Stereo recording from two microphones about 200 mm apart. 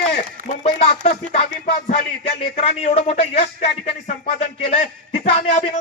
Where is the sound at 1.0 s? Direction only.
30° left (ahead or behind).